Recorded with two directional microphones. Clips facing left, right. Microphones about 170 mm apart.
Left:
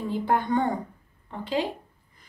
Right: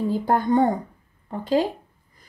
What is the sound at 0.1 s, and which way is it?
Speech, 40° right (ahead or behind).